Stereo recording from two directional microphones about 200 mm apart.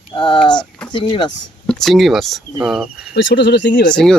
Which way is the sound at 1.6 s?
Centre (ahead or behind).